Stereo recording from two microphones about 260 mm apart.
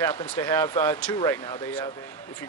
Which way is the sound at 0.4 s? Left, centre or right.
Centre.